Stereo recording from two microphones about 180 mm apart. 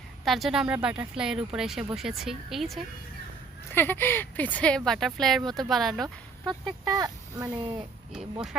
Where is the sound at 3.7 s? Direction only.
10° left (ahead or behind).